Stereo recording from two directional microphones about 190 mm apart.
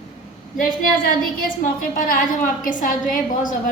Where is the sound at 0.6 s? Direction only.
45° left (ahead or behind).